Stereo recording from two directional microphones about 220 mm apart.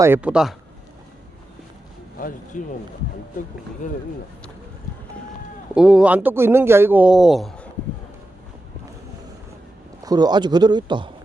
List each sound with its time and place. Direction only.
0.0 s speech: 10° right (ahead or behind)
2.1 s speech: 40° left (ahead or behind)
3.8 s speech: 35° left (ahead or behind)
5.7 s speech: 5° right (ahead or behind)
10.0 s speech: 15° right (ahead or behind)